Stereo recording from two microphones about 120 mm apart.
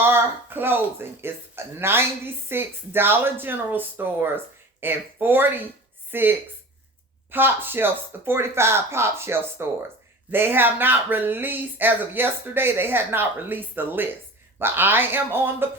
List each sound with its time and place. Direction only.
0.0 s a woman's voice: 20° right (ahead or behind)